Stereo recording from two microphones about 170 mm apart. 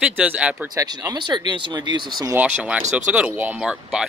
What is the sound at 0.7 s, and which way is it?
Speech, 20° right (ahead or behind).